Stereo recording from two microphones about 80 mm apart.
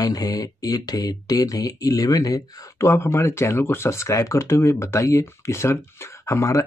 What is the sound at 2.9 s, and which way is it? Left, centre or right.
Speech, left.